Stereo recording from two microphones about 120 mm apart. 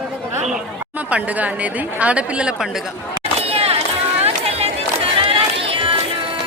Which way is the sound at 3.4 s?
55° right (ahead or behind).